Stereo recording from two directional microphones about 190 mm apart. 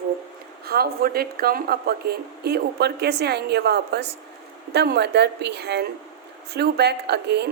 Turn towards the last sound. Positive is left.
turn(degrees=-60)  # may be behind; listen again after turning